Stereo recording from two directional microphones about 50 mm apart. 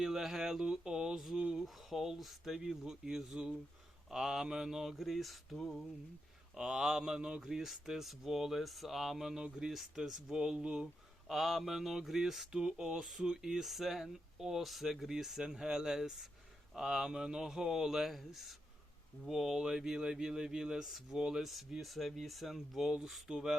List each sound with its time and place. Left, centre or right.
0.0 s speech: centre
0.6 s speech: centre
1.5 s speech: centre
6.6 s speech: centre
11.3 s speech: centre